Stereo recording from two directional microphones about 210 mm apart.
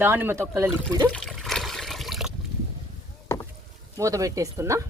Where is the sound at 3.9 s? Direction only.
15° right (ahead or behind).